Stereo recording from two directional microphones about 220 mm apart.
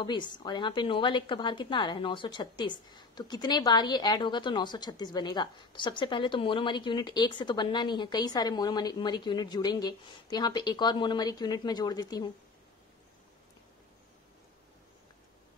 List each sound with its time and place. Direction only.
0.0 s a woman's voice: 20° left (ahead or behind)